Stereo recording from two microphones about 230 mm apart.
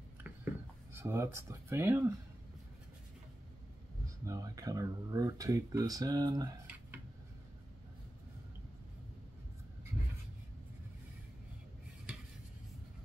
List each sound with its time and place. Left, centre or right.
0.9 s speech: centre
4.3 s speech: centre